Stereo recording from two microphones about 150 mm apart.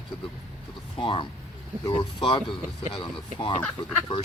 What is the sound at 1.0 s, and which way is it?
Speech, 35° left (ahead or behind).